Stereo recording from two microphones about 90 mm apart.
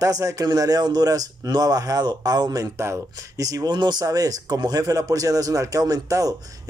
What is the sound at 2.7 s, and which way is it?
Speech, 30° right (ahead or behind).